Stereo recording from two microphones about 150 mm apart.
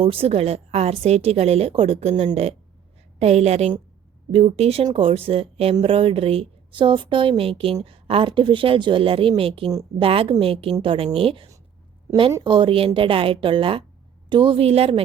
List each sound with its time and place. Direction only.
0.0 s a woman's voice: 40° right (ahead or behind)